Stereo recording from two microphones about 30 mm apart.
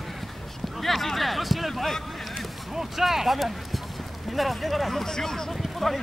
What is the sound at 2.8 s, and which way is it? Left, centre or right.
Speech, centre.